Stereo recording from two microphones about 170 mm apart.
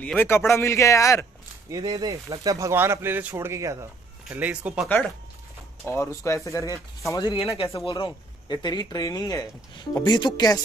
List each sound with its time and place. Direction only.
0.0 s speech: 10° left (ahead or behind)
1.7 s speech: 25° right (ahead or behind); by 4.8 s 10° right (ahead or behind)
4.8 s speech: 5° left (ahead or behind)
7.3 s speech: 35° left (ahead or behind)